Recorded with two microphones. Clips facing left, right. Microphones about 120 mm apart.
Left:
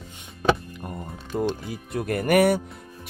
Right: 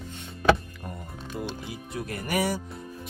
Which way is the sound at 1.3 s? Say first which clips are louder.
Left 8 dB; 50° left (ahead or behind).